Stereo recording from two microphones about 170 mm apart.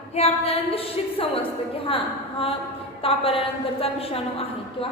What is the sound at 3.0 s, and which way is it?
A woman's voice, 35° left (ahead or behind).